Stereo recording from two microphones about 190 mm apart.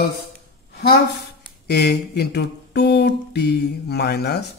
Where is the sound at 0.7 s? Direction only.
60° left (ahead or behind).